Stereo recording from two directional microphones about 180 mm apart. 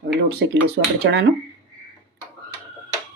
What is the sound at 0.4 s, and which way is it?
Speech, 80° right.